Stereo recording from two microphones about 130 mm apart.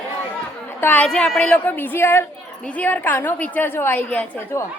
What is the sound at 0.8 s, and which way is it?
A woman's voice, 10° left (ahead or behind).